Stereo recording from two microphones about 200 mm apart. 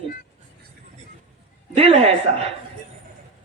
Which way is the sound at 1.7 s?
30° right (ahead or behind).